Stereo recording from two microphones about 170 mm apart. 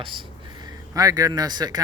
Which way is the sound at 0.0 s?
30° right (ahead or behind).